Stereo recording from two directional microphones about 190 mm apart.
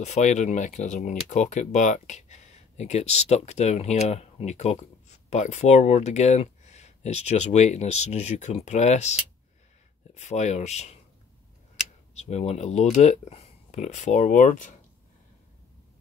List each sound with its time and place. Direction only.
0.0 s speech: 40° left (ahead or behind)
12.1 s speech: 35° left (ahead or behind)